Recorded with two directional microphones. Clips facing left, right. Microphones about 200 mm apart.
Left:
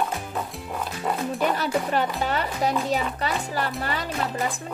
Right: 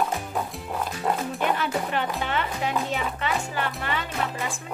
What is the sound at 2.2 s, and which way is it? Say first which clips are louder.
Music: left 3 dB; 40° left (ahead or behind).